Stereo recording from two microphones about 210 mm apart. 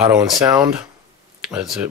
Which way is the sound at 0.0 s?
15° right (ahead or behind).